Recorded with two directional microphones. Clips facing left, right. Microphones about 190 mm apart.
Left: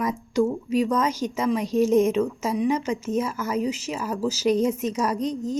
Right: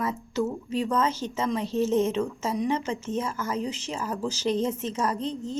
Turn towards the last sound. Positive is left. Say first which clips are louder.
# left 4 dB
turn(degrees=10)  # may be behind; listen again after turning